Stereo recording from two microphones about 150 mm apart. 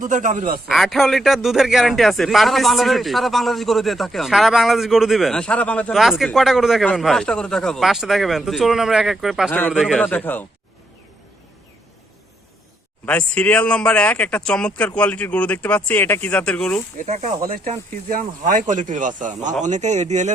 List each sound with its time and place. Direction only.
0.0 s speech: 60° right (ahead or behind)
0.7 s a man's voice: centre (ahead or behind)
5.9 s a man's voice: centre (ahead or behind)
9.5 s speech: 10° left (ahead or behind)
9.7 s a man's voice: centre (ahead or behind)
10.1 s speech: 10° left (ahead or behind)
13.1 s speech: 10° left (ahead or behind)
17.0 s speech: 50° right (ahead or behind)